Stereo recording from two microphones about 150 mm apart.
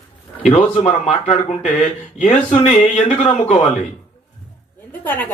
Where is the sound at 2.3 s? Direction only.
35° left (ahead or behind).